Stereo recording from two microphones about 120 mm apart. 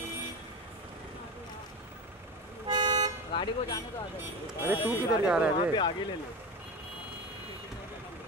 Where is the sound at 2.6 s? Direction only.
35° right (ahead or behind).